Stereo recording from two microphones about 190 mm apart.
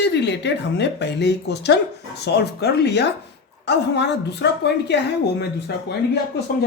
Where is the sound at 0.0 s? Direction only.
65° left (ahead or behind).